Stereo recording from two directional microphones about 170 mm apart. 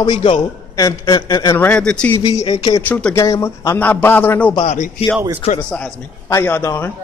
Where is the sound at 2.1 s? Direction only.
20° left (ahead or behind).